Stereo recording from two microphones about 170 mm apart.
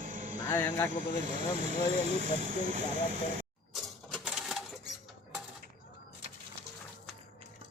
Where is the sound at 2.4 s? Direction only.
55° right (ahead or behind).